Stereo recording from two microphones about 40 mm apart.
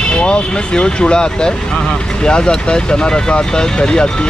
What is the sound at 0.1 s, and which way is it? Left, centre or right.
Speech, left.